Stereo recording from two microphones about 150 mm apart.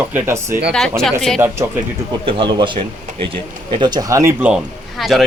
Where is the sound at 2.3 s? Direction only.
35° right (ahead or behind).